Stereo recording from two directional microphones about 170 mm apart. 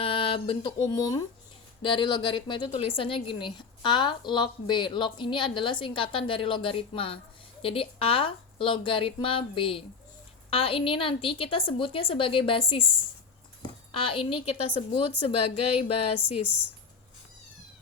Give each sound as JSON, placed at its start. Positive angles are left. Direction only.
{"t": 0.0, "sound": "a woman's voice", "side_deg": 30}